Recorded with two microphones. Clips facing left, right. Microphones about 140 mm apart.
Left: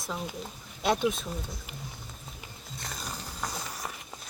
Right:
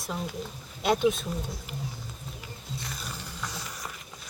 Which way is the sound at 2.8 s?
40° left (ahead or behind).